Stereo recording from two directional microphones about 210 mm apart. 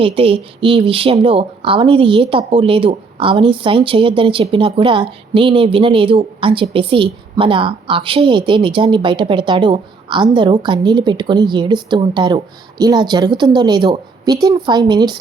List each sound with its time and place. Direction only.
0.0 s speech: 25° right (ahead or behind)